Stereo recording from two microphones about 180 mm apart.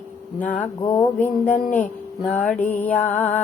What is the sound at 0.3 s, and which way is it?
Music, 10° left (ahead or behind).